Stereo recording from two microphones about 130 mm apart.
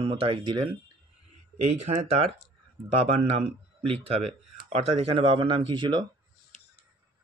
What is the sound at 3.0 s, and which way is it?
Speech, 45° right (ahead or behind).